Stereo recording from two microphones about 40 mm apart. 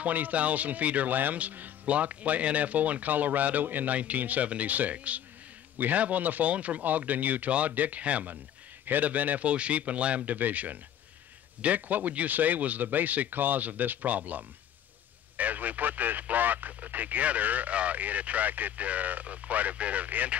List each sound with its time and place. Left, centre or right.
0.0 s speech: right
8.8 s speech: right